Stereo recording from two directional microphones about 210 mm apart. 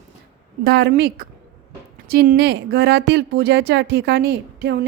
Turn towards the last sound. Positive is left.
turn(degrees=-50)  # may be behind; listen again after turning